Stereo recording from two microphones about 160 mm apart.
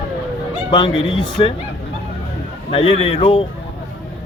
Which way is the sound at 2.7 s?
35° left (ahead or behind).